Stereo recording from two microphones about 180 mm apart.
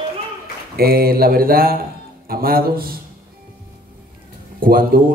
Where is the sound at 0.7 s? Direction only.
55° right (ahead or behind).